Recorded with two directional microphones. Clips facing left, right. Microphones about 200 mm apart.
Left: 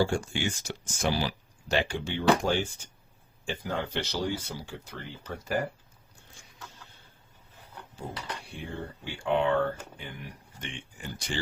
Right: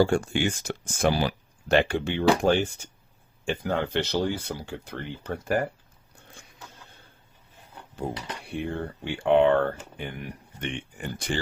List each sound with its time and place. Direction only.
0.0 s speech: 60° right (ahead or behind)
8.4 s speech: 60° right (ahead or behind)